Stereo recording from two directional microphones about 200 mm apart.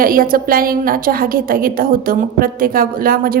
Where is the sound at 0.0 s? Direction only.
45° right (ahead or behind).